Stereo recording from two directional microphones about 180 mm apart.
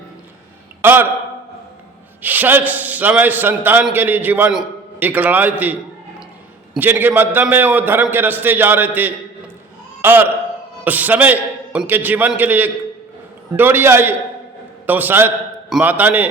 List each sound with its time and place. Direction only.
0.8 s speech: 10° right (ahead or behind)
2.2 s a man's voice: 10° right (ahead or behind)
6.7 s a man's voice: 10° right (ahead or behind)